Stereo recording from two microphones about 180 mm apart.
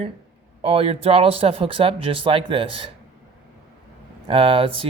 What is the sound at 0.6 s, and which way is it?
Speech, 35° right (ahead or behind).